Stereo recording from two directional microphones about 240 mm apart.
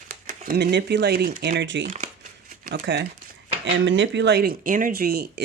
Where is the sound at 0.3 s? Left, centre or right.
Right.